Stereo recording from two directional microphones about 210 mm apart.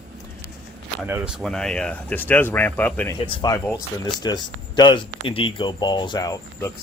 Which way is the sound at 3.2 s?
20° left (ahead or behind).